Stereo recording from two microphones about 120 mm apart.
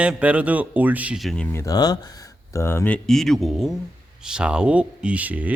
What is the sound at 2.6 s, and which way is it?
Speech, 20° left (ahead or behind).